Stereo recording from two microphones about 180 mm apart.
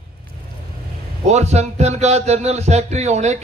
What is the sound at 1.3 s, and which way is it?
A man's voice, 40° right (ahead or behind).